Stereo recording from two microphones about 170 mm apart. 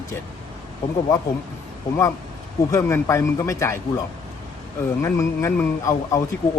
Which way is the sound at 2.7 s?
15° left (ahead or behind).